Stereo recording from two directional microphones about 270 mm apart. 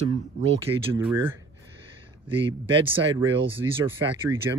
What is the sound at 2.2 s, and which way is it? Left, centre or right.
Speech, centre.